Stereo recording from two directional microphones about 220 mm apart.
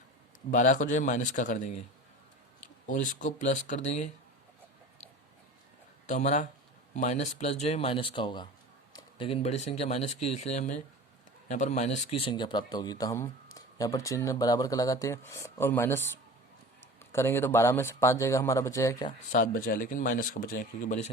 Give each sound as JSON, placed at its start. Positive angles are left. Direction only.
{"t": 0.5, "sound": "speech", "side_deg": 35}
{"t": 2.8, "sound": "speech", "side_deg": 35}
{"t": 6.1, "sound": "speech", "side_deg": 30}
{"t": 19.3, "sound": "speech", "side_deg": 35}